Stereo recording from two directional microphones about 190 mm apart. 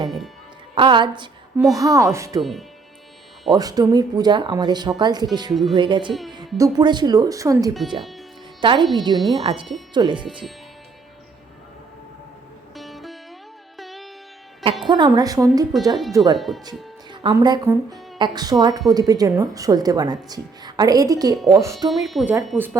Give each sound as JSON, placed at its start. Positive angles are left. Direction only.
{"t": 0.8, "sound": "speech", "side_deg": -25}
{"t": 2.4, "sound": "speech", "side_deg": 0}
{"t": 3.5, "sound": "speech", "side_deg": -20}
{"t": 12.7, "sound": "music", "side_deg": 0}
{"t": 14.6, "sound": "speech", "side_deg": -25}
{"t": 15.7, "sound": "speech", "side_deg": 0}
{"t": 16.1, "sound": "speech", "side_deg": -20}
{"t": 21.8, "sound": "speech", "side_deg": 0}